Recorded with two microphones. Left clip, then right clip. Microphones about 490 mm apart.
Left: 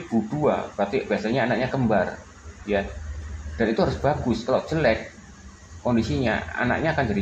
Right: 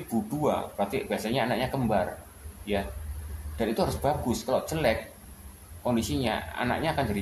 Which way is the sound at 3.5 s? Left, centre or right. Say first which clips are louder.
Left 5 dB; right.